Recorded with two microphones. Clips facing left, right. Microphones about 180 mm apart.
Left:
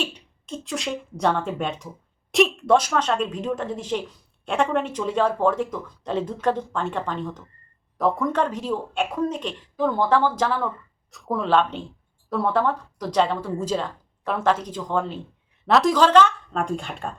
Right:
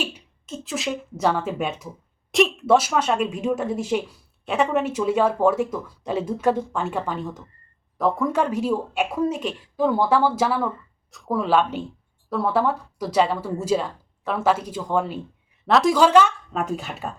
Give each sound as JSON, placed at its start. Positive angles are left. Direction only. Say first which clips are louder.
{"t": 0.0, "sound": "speech", "louder": "even", "side_deg": -5}